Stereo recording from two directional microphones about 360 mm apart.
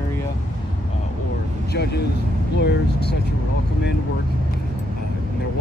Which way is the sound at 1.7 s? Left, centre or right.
Left.